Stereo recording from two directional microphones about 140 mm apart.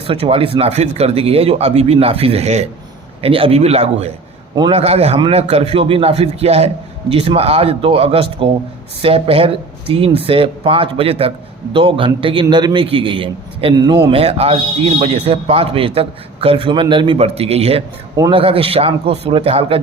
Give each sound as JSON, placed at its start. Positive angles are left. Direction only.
{"t": 0.1, "sound": "a man's voice", "side_deg": -40}